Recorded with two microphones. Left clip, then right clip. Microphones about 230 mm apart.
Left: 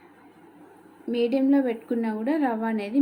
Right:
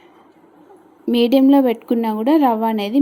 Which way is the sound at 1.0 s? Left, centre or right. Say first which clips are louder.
Right 9 dB; right.